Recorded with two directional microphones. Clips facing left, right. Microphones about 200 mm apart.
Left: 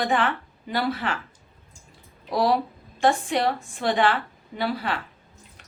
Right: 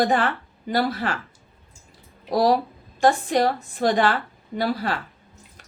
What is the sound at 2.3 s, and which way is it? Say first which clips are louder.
A woman's voice: right 3 dB; 40° right (ahead or behind).